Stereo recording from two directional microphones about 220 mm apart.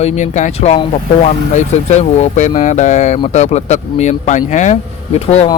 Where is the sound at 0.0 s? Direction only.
35° left (ahead or behind).